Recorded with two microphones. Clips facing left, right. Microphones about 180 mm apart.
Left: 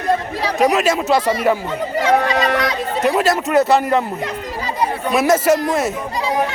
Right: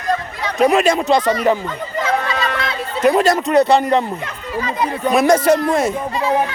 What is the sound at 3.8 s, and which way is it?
Speech, 25° right (ahead or behind).